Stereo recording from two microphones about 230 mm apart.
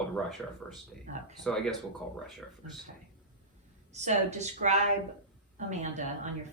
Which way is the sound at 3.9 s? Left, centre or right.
Right.